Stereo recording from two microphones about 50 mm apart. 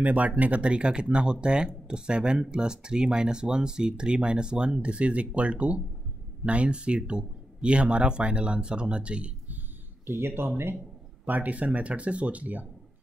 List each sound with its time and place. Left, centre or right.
0.0 s speech: right
9.5 s a sound: right
10.1 s speech: right
11.2 s speech: right